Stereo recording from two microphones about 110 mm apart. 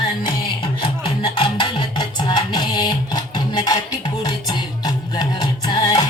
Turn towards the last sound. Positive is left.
turn(degrees=40)  # may be behind; listen again after turning